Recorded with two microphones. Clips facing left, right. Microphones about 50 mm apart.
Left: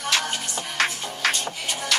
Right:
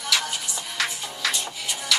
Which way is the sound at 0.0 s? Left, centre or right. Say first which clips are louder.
Left 1 dB; left.